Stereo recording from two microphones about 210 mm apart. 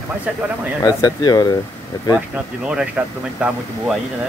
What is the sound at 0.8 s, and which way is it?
Speech, 20° left (ahead or behind).